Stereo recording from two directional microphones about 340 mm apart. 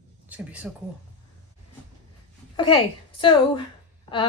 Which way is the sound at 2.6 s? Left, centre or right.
Centre.